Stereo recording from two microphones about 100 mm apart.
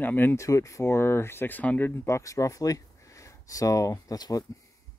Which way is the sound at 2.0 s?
30° left (ahead or behind).